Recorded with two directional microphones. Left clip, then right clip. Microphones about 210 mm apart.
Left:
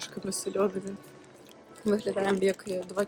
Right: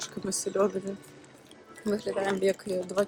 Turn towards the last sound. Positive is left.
turn(degrees=10)  # may be behind; listen again after turning